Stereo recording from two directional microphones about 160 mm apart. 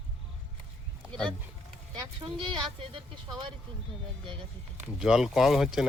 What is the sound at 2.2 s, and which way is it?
Speech, 35° right (ahead or behind).